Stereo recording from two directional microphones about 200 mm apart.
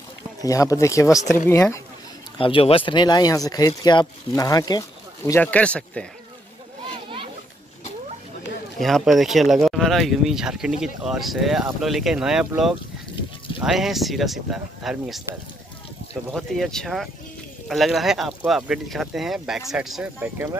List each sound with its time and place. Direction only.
0.4 s speech: 15° left (ahead or behind)
2.3 s speech: 25° left (ahead or behind); by 6.0 s 5° left (ahead or behind)
8.7 s speech: centre (ahead or behind)
16.3 s speech: centre (ahead or behind)